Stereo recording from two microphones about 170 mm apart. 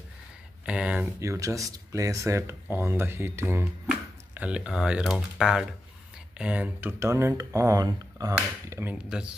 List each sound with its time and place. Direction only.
0.7 s speech: 5° right (ahead or behind)
1.2 s speech: 20° right (ahead or behind)